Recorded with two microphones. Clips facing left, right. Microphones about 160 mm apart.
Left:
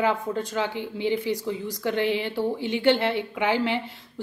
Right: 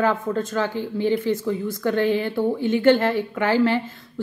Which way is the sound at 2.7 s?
50° right (ahead or behind).